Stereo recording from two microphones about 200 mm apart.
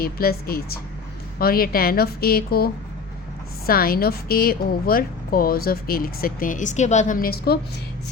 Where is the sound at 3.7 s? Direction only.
50° left (ahead or behind).